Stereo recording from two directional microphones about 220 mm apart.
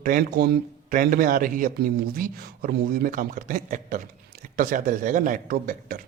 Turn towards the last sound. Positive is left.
turn(degrees=-40)  # may be behind; listen again after turning